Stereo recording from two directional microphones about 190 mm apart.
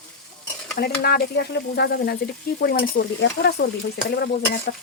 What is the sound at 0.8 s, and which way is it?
Speech, 55° left (ahead or behind).